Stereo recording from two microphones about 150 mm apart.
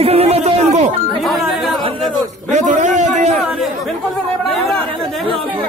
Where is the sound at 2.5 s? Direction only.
55° right (ahead or behind).